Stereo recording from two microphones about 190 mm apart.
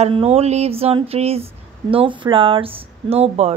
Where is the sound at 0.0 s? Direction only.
30° right (ahead or behind).